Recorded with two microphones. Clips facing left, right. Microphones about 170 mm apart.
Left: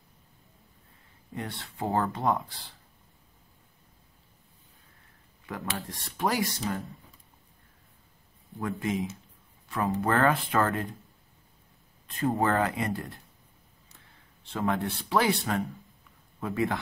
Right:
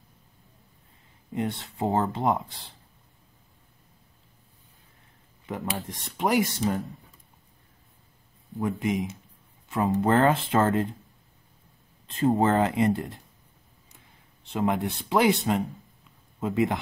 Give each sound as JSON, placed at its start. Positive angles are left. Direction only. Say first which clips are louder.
{"t": 1.3, "sound": "speech", "louder": "right 7 dB", "side_deg": -20}
{"t": 5.5, "sound": "speech", "louder": "right 3 dB", "side_deg": -20}
{"t": 8.5, "sound": "speech", "louder": "right 3 dB", "side_deg": -20}
{"t": 12.1, "sound": "speech", "louder": "right 4 dB", "side_deg": -25}
{"t": 14.4, "sound": "speech", "louder": "right 3 dB", "side_deg": -20}
{"t": 16.0, "sound": "a sound", "louder": "right 5 dB", "side_deg": -20}